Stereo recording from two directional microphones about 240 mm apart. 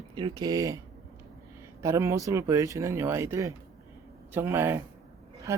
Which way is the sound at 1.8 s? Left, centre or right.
Centre.